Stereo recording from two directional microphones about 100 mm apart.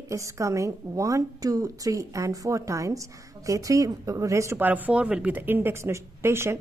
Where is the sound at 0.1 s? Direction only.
30° right (ahead or behind).